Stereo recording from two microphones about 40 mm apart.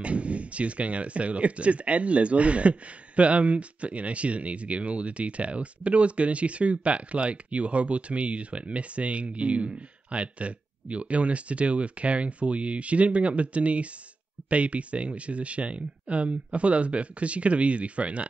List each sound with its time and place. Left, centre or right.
0.0 s speech: right